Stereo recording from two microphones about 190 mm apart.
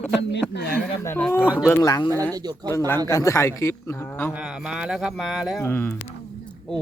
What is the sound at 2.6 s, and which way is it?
Speech, 10° left (ahead or behind).